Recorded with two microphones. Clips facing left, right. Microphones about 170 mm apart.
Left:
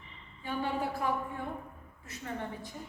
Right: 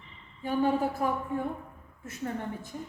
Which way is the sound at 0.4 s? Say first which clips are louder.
Right 7 dB; 45° right (ahead or behind).